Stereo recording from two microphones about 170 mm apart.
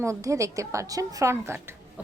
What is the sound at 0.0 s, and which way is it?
Speech, 15° right (ahead or behind).